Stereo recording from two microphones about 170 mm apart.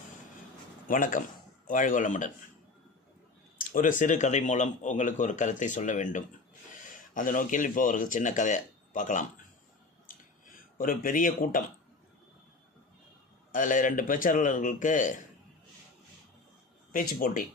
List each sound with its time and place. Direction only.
0.9 s speech: 50° left (ahead or behind)
3.6 s speech: 55° left (ahead or behind)
10.4 s speech: 55° left (ahead or behind)
13.5 s speech: 50° left (ahead or behind)
16.9 s speech: 55° left (ahead or behind)